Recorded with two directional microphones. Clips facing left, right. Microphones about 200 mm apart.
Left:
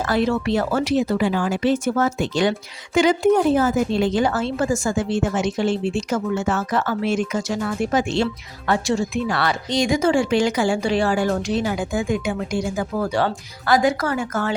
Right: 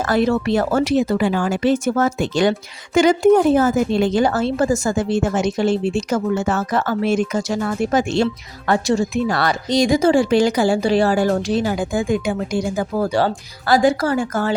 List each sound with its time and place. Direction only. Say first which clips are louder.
0.1 s speech: right 3 dB; 45° right (ahead or behind)